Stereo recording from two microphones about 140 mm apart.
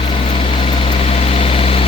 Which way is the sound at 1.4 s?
40° left (ahead or behind).